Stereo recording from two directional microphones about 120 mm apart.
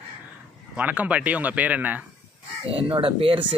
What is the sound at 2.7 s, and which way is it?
Speech, 50° right (ahead or behind).